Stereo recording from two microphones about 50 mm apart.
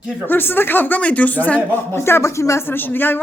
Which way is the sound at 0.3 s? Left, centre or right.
Left.